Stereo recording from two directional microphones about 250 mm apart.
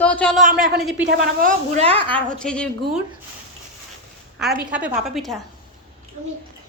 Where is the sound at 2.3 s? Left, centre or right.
Centre.